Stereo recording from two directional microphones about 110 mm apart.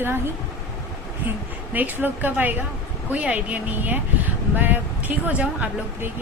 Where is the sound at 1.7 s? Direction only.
15° right (ahead or behind).